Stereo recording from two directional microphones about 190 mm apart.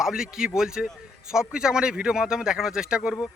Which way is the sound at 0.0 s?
5° right (ahead or behind).